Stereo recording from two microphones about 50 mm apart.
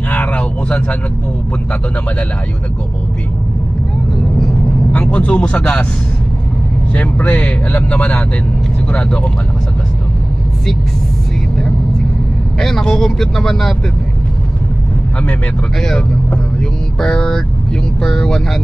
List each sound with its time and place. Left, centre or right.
0.1 s a sound: left
4.9 s speech: left
6.9 s speech: left
12.5 s speech: centre
17.0 s speech: centre